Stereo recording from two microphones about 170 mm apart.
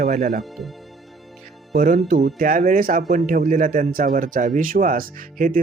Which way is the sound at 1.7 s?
50° right (ahead or behind).